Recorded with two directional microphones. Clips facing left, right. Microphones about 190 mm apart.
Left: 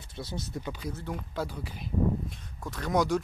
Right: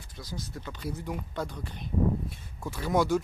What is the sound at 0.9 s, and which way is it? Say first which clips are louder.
Speech: right 1 dB; 10° right (ahead or behind).